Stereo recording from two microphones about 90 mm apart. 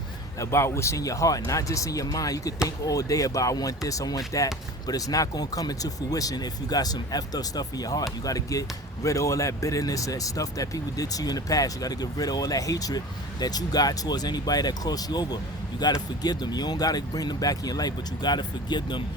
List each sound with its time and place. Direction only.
0.3 s speech: 30° left (ahead or behind); by 19.0 s 55° left (ahead or behind)